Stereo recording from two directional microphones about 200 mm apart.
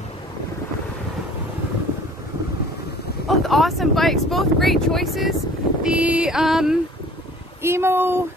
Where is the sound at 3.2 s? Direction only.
Centre (ahead or behind).